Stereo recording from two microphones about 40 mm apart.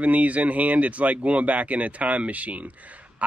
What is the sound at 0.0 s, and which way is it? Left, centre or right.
Speech, right.